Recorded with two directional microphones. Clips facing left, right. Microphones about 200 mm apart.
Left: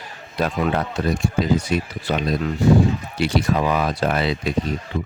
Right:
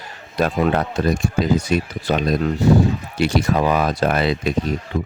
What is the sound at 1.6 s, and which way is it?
Speech, 45° right (ahead or behind).